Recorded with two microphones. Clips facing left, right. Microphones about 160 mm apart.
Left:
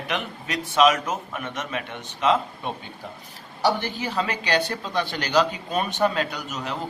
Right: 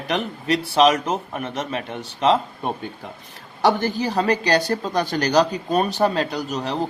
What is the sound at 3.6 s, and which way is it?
Speech, 45° right (ahead or behind).